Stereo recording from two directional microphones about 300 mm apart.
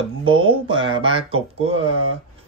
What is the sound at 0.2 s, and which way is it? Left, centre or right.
Speech, centre.